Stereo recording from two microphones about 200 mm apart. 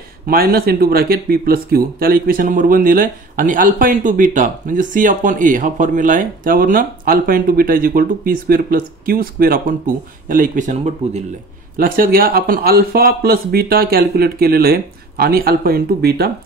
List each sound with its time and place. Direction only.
0.3 s speech: 50° right (ahead or behind)